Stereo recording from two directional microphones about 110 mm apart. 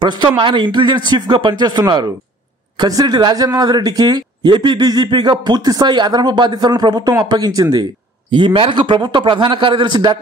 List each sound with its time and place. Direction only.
0.0 s a man's voice: 45° right (ahead or behind)